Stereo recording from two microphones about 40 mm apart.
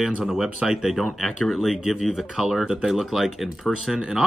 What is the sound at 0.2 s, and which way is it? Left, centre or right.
Speech, centre.